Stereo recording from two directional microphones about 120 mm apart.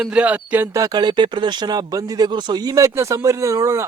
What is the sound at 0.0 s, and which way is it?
Speech, 10° right (ahead or behind).